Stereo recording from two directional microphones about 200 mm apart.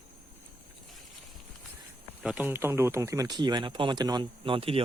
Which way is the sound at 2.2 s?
5° right (ahead or behind).